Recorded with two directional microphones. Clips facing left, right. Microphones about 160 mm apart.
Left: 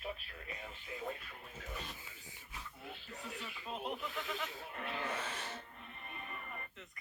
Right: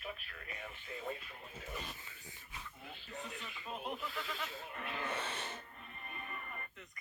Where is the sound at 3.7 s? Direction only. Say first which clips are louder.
Left 1 dB; 20° left (ahead or behind).